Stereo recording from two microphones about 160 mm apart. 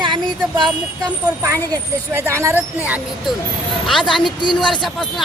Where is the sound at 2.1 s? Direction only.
15° right (ahead or behind).